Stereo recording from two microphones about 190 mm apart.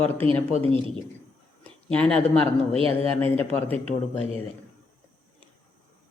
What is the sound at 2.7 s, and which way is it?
Speech, 30° right (ahead or behind).